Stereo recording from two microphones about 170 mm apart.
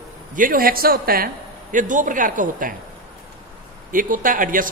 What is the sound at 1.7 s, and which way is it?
Speech, 50° right (ahead or behind).